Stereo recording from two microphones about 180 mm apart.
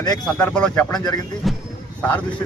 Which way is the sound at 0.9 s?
20° left (ahead or behind).